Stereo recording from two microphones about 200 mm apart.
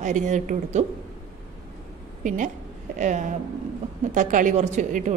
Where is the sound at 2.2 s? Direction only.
40° right (ahead or behind).